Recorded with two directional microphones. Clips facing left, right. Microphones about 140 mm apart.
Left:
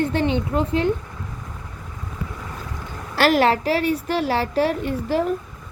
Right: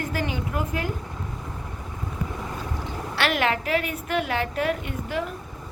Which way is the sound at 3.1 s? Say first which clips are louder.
Left 7 dB; 35° left (ahead or behind).